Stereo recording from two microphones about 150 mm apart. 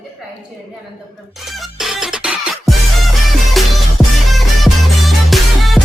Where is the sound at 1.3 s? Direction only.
Centre (ahead or behind).